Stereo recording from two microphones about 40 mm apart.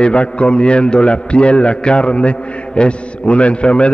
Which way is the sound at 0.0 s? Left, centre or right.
Left.